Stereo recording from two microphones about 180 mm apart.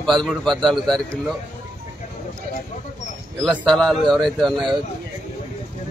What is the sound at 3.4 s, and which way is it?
A man's voice, centre (ahead or behind).